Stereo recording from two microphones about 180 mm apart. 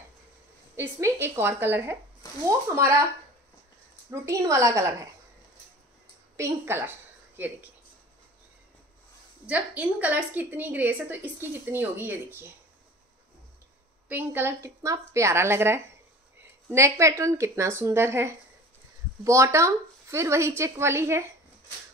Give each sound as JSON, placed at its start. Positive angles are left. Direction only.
{"t": 0.7, "sound": "a woman's voice", "side_deg": -15}
{"t": 4.1, "sound": "a woman's voice", "side_deg": -15}
{"t": 6.3, "sound": "a woman's voice", "side_deg": -15}
{"t": 9.5, "sound": "a woman's voice", "side_deg": -10}
{"t": 14.0, "sound": "a woman's voice", "side_deg": -10}